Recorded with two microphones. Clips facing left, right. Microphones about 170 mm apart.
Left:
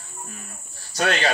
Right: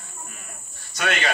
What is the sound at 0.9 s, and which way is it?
Speech, 35° left (ahead or behind).